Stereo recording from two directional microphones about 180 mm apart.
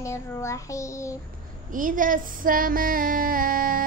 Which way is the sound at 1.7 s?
50° right (ahead or behind).